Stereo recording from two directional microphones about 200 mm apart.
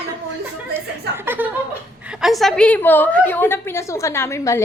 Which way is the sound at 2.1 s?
Centre (ahead or behind).